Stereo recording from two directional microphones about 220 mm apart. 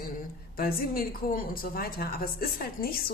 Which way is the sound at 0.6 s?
40° left (ahead or behind).